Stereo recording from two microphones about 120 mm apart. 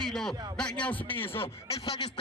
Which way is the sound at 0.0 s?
5° left (ahead or behind).